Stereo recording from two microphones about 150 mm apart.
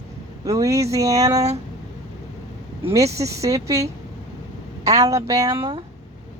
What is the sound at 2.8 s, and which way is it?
A woman's voice, 20° right (ahead or behind).